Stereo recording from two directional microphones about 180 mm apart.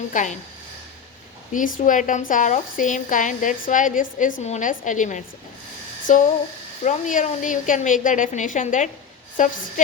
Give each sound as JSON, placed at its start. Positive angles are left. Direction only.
{"t": 0.1, "sound": "a woman's voice", "side_deg": 45}
{"t": 1.5, "sound": "a woman's voice", "side_deg": 45}